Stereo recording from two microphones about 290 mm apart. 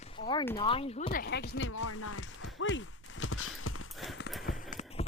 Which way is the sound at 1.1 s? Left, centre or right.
Left.